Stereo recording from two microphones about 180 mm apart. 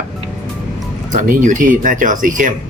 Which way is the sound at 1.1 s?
45° right (ahead or behind).